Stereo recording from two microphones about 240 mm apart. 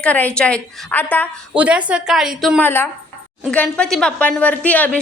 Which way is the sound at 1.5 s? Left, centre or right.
Centre.